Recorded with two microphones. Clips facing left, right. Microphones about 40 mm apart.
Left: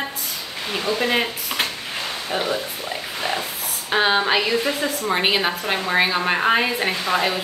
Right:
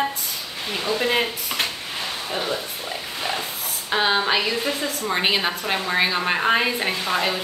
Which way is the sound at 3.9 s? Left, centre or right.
Centre.